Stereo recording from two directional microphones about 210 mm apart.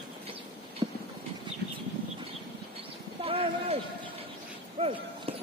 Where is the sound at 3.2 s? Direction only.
25° right (ahead or behind).